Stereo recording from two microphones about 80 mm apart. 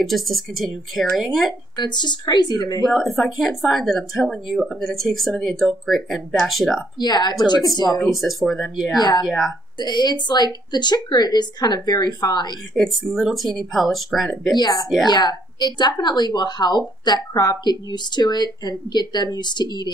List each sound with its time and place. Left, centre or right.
0.0 s speech: centre
1.8 s speech: left
2.8 s speech: centre
7.0 s speech: left
8.1 s speech: centre
9.0 s speech: left
12.7 s speech: centre
14.5 s speech: left